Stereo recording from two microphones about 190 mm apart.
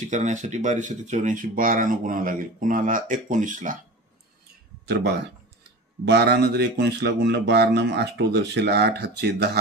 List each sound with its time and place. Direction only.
0.1 s speech: 40° right (ahead or behind)
4.8 s speech: 60° right (ahead or behind)